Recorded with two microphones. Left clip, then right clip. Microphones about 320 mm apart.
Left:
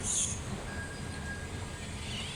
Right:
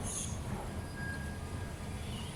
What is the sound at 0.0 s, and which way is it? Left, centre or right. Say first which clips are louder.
Vehicle: left 8 dB; right.